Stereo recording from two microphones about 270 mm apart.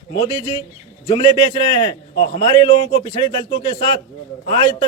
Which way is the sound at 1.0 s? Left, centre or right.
Centre.